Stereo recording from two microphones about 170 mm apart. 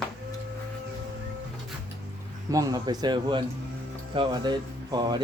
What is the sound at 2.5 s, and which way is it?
Speech, 20° right (ahead or behind).